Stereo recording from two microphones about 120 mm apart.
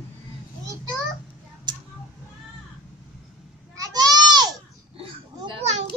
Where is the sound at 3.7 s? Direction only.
30° right (ahead or behind).